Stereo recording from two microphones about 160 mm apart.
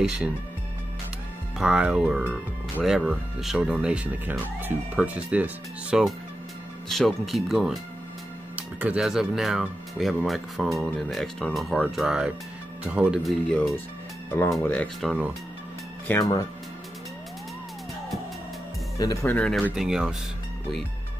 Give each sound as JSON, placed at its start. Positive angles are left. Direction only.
{"t": 1.6, "sound": "speech", "side_deg": -5}
{"t": 16.1, "sound": "speech", "side_deg": 20}
{"t": 18.9, "sound": "speech", "side_deg": 20}
{"t": 19.3, "sound": "speech", "side_deg": 5}
{"t": 19.7, "sound": "speech", "side_deg": -5}